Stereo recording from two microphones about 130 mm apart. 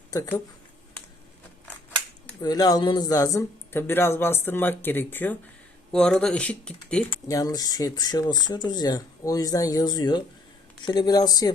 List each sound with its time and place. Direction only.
2.4 s speech: 30° left (ahead or behind); by 7.0 s 10° left (ahead or behind)
7.3 s speech: 25° left (ahead or behind)